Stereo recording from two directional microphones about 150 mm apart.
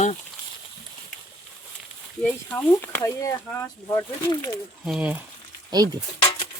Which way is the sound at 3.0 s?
20° left (ahead or behind).